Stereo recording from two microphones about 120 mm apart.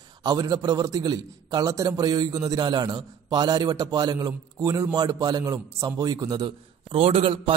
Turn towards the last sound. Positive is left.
turn(degrees=-50)  # may be behind; listen again after turning